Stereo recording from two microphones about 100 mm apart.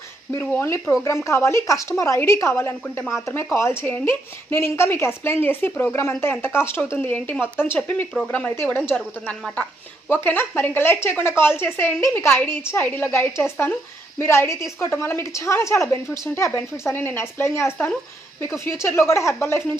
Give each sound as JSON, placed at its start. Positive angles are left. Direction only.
{"t": 0.5, "sound": "a woman's voice", "side_deg": 25}
{"t": 8.5, "sound": "a woman's voice", "side_deg": 25}
{"t": 10.1, "sound": "a woman's voice", "side_deg": 20}